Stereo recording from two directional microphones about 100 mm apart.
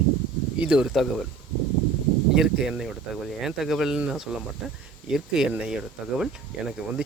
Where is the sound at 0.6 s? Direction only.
10° right (ahead or behind).